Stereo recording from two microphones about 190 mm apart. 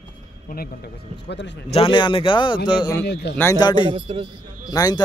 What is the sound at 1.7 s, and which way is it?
A man's voice, 25° left (ahead or behind).